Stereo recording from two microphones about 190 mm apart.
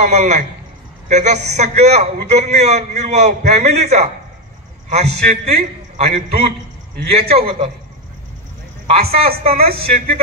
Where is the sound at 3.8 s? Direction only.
35° right (ahead or behind).